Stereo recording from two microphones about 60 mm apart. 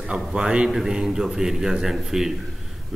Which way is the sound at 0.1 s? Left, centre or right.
Centre.